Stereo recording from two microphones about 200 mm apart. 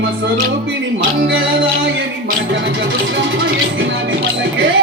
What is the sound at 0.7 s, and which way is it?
Music, 60° right (ahead or behind).